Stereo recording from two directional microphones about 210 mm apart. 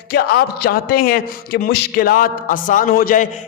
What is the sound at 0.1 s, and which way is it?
A man's voice, 50° left (ahead or behind).